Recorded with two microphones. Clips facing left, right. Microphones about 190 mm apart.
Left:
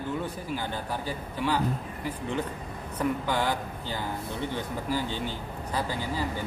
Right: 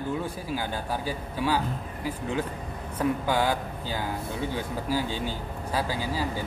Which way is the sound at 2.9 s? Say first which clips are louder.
Right 2 dB; 10° right (ahead or behind).